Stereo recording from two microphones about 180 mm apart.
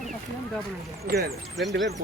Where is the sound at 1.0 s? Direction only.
55° right (ahead or behind).